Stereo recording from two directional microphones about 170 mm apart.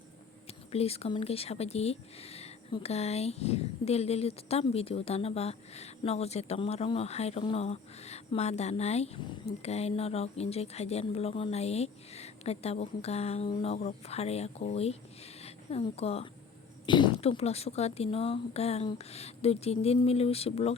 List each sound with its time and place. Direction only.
0.7 s speech: 35° left (ahead or behind)